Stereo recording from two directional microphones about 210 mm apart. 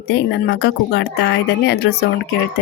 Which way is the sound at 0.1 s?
55° left (ahead or behind).